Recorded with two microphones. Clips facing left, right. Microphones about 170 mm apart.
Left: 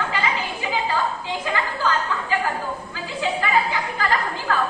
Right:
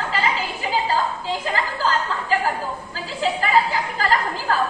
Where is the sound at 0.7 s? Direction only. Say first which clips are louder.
Right 2 dB; 35° right (ahead or behind).